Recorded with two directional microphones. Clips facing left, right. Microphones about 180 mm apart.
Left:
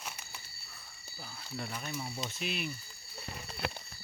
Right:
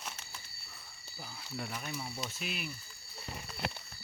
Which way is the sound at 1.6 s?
5° right (ahead or behind).